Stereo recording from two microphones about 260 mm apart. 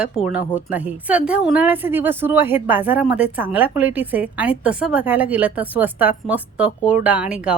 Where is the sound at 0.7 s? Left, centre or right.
Centre.